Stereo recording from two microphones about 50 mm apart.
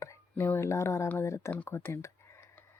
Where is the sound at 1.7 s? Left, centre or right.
Left.